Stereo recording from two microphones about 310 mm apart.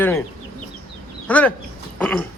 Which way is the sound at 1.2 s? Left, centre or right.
Centre.